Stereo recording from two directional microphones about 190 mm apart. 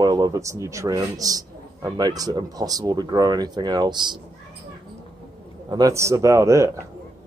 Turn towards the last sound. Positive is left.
turn(degrees=-15)  # may be behind; listen again after turning